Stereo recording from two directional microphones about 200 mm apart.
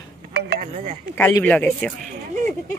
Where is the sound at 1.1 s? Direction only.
10° left (ahead or behind).